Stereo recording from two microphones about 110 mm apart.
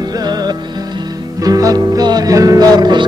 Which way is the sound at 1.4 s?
35° right (ahead or behind).